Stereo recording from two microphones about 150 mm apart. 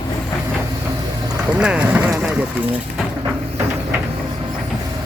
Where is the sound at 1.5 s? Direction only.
5° right (ahead or behind).